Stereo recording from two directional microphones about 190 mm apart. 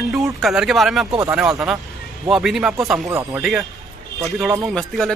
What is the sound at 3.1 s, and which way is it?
Speech, 15° right (ahead or behind).